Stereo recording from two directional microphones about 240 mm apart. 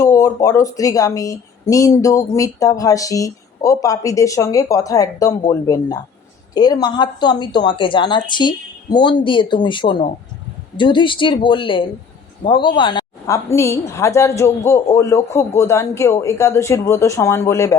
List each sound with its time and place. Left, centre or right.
0.0 s speech: centre